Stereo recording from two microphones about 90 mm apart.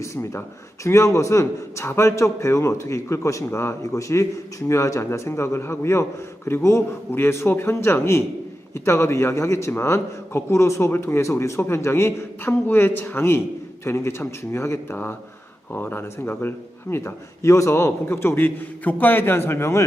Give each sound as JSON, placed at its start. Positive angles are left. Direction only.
{"t": 0.0, "sound": "a man's voice", "side_deg": 30}